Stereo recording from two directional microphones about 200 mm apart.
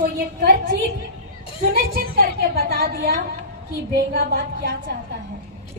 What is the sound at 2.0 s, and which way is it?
A woman's voice, 50° right (ahead or behind).